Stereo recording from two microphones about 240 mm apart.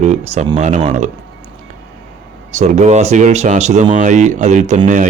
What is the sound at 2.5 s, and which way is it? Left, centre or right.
Speech, right.